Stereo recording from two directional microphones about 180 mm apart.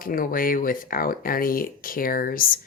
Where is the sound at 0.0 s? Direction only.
50° left (ahead or behind).